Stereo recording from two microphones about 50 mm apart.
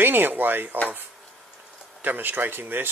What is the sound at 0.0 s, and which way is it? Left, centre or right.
Speech, right.